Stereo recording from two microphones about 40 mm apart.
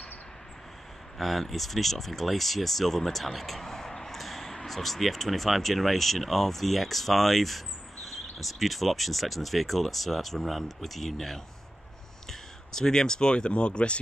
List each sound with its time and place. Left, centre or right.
1.1 s speech: centre; by 13.9 s left